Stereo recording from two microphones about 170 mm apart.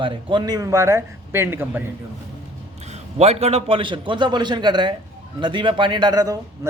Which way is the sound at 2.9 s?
40° right (ahead or behind).